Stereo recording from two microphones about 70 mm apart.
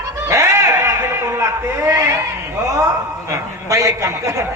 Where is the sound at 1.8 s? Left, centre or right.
Right.